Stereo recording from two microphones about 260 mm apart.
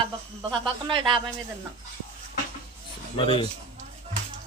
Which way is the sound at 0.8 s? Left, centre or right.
Centre.